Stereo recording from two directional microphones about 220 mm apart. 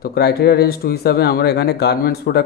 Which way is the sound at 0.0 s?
45° left (ahead or behind).